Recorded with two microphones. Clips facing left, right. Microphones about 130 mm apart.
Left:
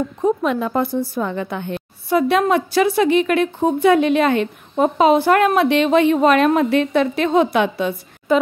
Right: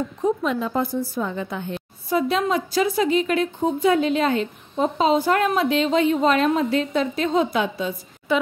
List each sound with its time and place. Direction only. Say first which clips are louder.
0.2 s a woman's voice: left 4 dB; 60° left (ahead or behind)
8.3 s a woman's voice: left 5 dB; 45° left (ahead or behind)